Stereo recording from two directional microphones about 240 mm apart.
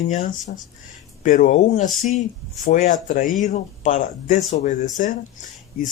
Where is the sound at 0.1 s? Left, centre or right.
Left.